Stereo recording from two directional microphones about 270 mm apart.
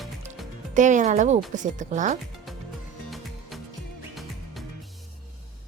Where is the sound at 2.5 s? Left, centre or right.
Centre.